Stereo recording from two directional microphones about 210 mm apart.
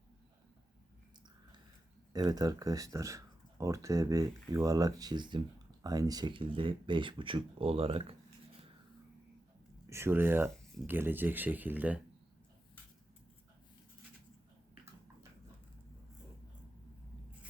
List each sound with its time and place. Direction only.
2.1 s speech: 15° right (ahead or behind)
9.9 s speech: 10° right (ahead or behind)